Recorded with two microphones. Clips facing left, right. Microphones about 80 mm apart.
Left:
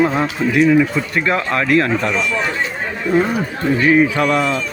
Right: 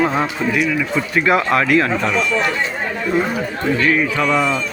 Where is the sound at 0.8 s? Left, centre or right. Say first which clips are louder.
Left 1 dB; centre.